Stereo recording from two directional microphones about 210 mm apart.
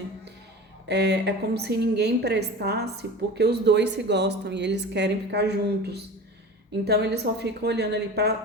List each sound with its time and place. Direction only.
0.9 s a woman's voice: 55° right (ahead or behind)